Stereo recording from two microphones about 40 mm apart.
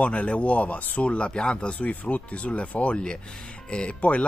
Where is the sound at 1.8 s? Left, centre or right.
Left.